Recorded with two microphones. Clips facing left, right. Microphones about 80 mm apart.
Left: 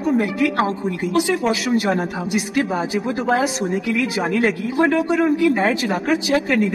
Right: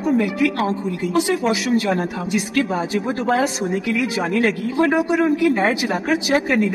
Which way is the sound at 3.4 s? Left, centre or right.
Centre.